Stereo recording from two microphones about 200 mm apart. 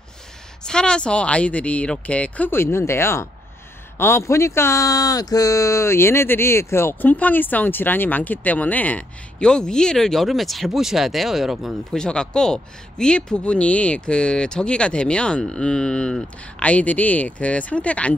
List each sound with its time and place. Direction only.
0.7 s speech: 5° left (ahead or behind)